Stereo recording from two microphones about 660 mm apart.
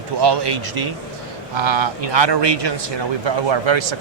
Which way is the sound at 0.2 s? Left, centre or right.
Right.